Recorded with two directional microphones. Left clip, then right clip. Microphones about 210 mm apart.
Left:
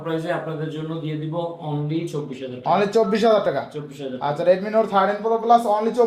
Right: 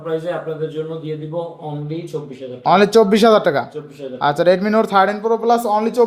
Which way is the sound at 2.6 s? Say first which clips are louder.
Right 7 dB; 50° right (ahead or behind).